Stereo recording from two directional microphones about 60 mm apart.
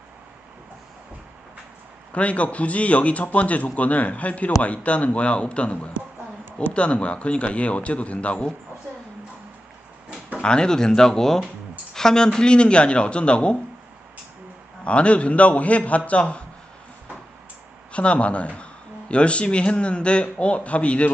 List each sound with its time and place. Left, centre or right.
2.1 s speech: left
10.4 s speech: centre
14.8 s speech: centre
17.9 s speech: left